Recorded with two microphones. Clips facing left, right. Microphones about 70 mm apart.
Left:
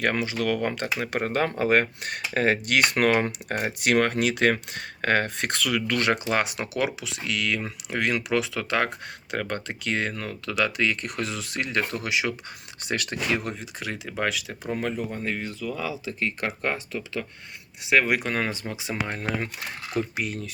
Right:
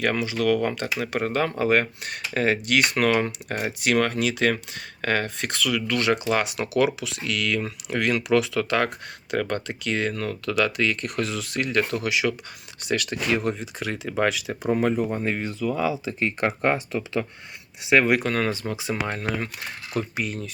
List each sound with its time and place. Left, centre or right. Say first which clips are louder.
0.0 s speech: right 2 dB; left
3.5 s speech: even; left
6.7 s speech: right 6 dB; left
10.2 s speech: right 3 dB; centre; by 13.1 s left
13.3 s speech: right 7 dB; centre
14.6 s speech: right 7 dB; centre
15.1 s speech: right 4 dB; right
17.8 s speech: right 3 dB; centre
18.1 s speech: right 3 dB; centre
18.6 s speech: right 3 dB; centre